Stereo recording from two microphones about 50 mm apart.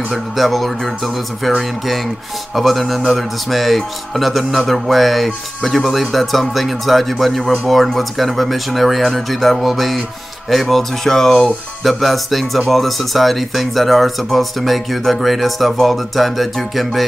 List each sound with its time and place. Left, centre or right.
0.4 s speech: centre
2.5 s speech: centre